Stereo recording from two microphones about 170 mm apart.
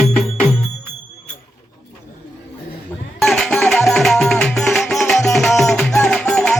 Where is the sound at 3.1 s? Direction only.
Centre (ahead or behind).